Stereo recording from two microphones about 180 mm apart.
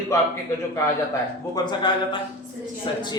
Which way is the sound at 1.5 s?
25° left (ahead or behind).